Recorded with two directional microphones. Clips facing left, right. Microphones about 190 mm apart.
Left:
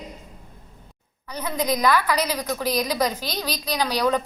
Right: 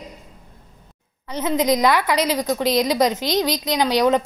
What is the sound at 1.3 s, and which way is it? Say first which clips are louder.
A woman's voice: right 6 dB; 25° right (ahead or behind).